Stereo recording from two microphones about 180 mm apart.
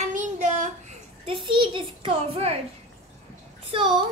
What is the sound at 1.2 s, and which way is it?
A child's voice, 30° right (ahead or behind).